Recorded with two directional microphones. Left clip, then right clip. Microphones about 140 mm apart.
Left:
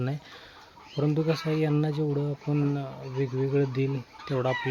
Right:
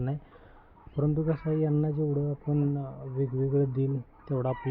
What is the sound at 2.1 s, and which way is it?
Speech, 30° left (ahead or behind).